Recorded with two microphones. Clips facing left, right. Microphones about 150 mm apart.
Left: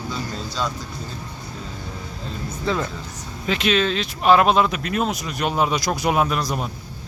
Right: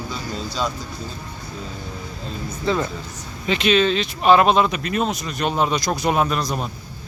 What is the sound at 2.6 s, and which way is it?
Speech, centre (ahead or behind).